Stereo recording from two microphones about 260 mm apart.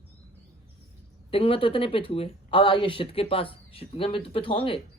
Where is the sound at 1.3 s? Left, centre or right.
Left.